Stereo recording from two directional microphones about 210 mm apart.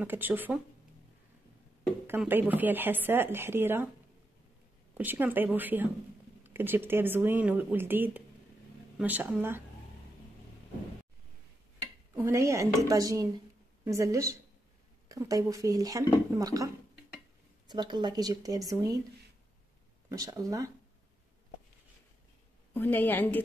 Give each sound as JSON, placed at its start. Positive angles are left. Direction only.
{"t": 0.0, "sound": "a woman's voice", "side_deg": -10}
{"t": 2.0, "sound": "a woman's voice", "side_deg": -10}
{"t": 4.9, "sound": "a woman's voice", "side_deg": -10}
{"t": 12.2, "sound": "a woman's voice", "side_deg": -15}
{"t": 20.1, "sound": "a woman's voice", "side_deg": -15}
{"t": 22.8, "sound": "a woman's voice", "side_deg": 10}